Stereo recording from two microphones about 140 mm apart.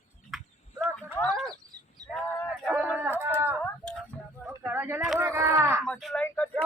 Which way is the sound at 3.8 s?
5° left (ahead or behind).